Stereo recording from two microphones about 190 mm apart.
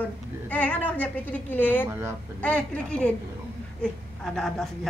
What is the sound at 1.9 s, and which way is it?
Speech, 15° right (ahead or behind).